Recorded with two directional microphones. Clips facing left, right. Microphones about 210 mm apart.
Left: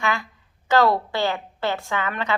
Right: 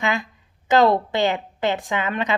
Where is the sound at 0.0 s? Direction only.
20° right (ahead or behind).